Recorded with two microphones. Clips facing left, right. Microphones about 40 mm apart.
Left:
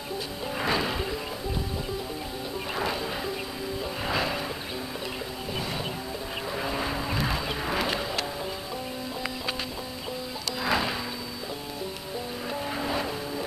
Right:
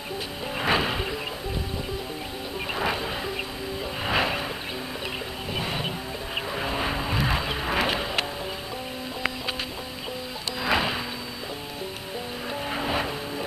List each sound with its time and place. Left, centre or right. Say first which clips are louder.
0.7 s music: right 4 dB; right
2.8 s music: right 2 dB; right
5.5 s music: right 3 dB; right
6.5 s vehicle: right 2 dB; right
10.7 s music: right 3 dB; right
12.6 s vehicle: right 3 dB; right